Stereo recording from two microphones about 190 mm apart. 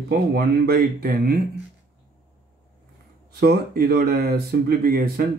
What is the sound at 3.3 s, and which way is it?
Speech, 55° right (ahead or behind).